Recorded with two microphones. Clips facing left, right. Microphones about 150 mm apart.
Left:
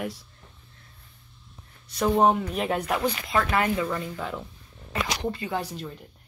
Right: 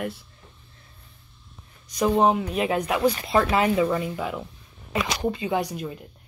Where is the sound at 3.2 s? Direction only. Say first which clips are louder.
Right 4 dB; 25° right (ahead or behind).